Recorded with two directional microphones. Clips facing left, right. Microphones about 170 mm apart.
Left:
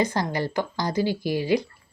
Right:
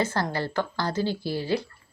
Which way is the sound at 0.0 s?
15° left (ahead or behind).